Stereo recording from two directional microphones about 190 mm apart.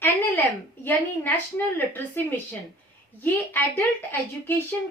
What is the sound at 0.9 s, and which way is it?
A woman's voice, 10° left (ahead or behind).